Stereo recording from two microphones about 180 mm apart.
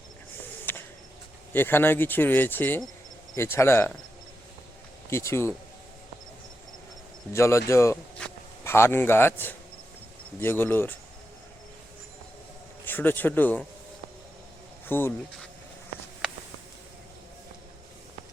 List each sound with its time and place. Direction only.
0.6 s a sound: 10° left (ahead or behind)
1.5 s speech: 10° left (ahead or behind)
5.1 s speech: 15° left (ahead or behind)
7.3 s speech: 15° left (ahead or behind)
12.8 s speech: 10° left (ahead or behind)
14.8 s speech: 10° left (ahead or behind)